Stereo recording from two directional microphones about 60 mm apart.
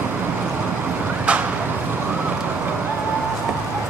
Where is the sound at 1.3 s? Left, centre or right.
Centre.